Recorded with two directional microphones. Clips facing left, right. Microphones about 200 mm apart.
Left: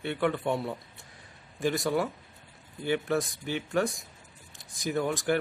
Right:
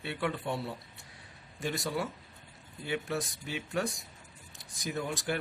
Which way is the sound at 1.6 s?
55° left (ahead or behind).